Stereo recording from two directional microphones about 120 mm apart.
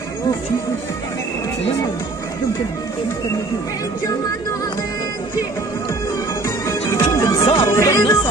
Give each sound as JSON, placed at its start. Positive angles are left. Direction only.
{"t": 6.4, "sound": "music", "side_deg": 25}
{"t": 7.6, "sound": "speech", "side_deg": 25}